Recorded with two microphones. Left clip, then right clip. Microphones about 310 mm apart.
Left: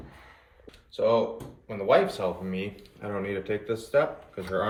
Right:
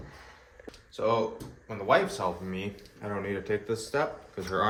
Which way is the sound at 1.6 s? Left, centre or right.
Centre.